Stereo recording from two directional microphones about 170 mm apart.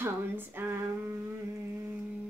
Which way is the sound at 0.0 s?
10° right (ahead or behind).